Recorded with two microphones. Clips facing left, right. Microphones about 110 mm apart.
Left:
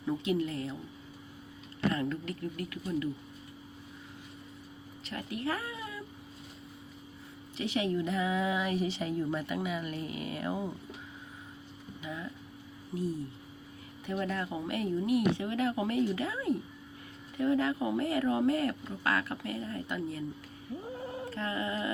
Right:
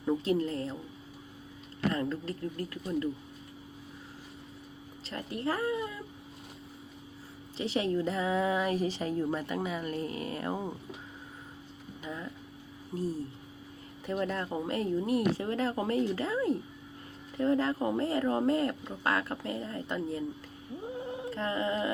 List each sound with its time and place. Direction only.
0.0 s a woman's voice: 25° right (ahead or behind)
1.9 s a woman's voice: 30° right (ahead or behind)
5.0 s speech: 30° right (ahead or behind)
7.5 s a woman's voice: 30° right (ahead or behind)
14.1 s a woman's voice: 35° right (ahead or behind)
21.1 s dog: 25° right (ahead or behind)